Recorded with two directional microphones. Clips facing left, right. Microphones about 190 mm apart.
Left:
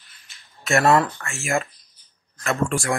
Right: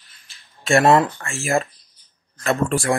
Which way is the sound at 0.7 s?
25° right (ahead or behind).